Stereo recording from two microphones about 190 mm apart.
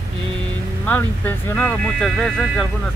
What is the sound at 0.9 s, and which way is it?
Speech, 10° left (ahead or behind).